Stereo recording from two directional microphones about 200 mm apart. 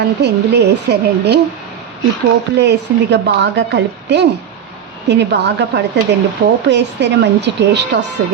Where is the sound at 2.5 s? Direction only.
55° right (ahead or behind).